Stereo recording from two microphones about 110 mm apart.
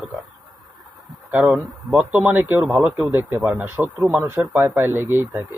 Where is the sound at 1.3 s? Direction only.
15° right (ahead or behind).